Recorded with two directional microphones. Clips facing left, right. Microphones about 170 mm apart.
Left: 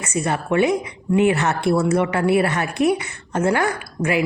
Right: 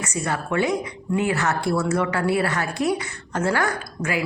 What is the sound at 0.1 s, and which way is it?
A man's voice, 20° left (ahead or behind).